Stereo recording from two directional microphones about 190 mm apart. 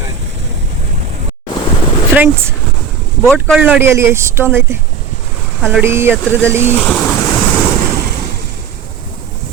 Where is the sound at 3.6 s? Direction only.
10° right (ahead or behind).